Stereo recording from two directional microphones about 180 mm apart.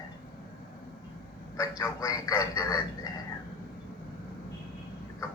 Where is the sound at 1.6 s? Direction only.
20° left (ahead or behind).